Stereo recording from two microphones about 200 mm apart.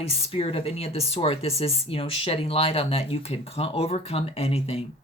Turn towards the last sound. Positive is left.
turn(degrees=30)  # may be behind; listen again after turning